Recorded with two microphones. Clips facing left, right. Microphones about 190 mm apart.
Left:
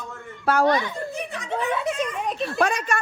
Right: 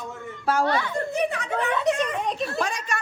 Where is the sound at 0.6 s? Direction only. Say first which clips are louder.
Left 4 dB; 15° left (ahead or behind).